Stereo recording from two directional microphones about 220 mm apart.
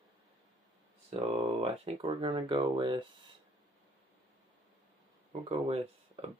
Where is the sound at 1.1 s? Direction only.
25° right (ahead or behind).